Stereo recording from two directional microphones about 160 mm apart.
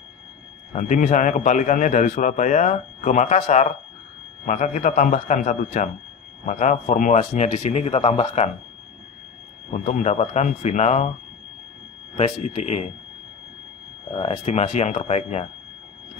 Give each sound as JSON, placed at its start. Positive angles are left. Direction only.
{"t": 0.7, "sound": "a man's voice", "side_deg": 50}
{"t": 9.8, "sound": "a man's voice", "side_deg": 45}
{"t": 12.2, "sound": "a man's voice", "side_deg": 45}
{"t": 14.1, "sound": "a man's voice", "side_deg": 40}